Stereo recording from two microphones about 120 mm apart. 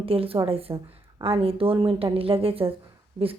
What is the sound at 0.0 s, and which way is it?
A woman's voice, 50° right (ahead or behind).